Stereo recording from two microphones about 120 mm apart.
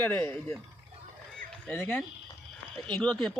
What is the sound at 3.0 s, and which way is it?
Speech, 5° left (ahead or behind).